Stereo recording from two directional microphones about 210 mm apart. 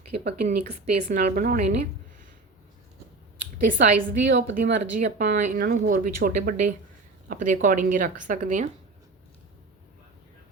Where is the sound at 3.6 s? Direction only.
35° right (ahead or behind).